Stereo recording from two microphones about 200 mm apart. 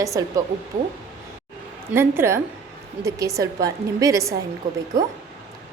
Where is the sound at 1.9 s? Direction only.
10° right (ahead or behind).